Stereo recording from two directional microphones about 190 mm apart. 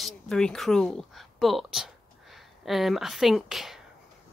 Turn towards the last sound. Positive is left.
turn(degrees=0)  # may be behind; listen again after turning